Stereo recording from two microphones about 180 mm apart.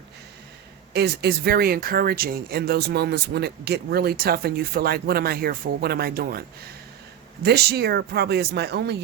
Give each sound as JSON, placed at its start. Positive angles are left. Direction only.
{"t": 0.9, "sound": "speech", "side_deg": -65}
{"t": 7.4, "sound": "speech", "side_deg": -65}